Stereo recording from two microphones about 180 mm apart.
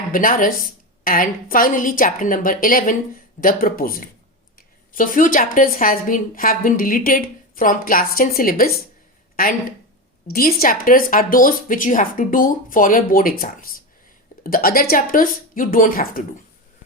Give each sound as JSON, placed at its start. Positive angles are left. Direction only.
{"t": 0.1, "sound": "a woman's voice", "side_deg": 50}